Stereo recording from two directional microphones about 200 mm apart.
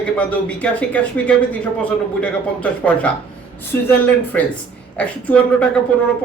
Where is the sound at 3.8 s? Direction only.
10° left (ahead or behind).